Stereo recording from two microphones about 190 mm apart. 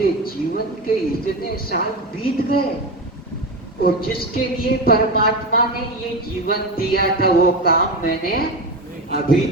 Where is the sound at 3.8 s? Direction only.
50° left (ahead or behind).